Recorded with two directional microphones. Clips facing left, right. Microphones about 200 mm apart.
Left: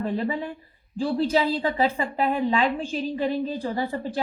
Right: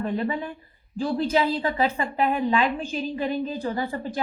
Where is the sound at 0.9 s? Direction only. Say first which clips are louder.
Left 1 dB; 30° left (ahead or behind).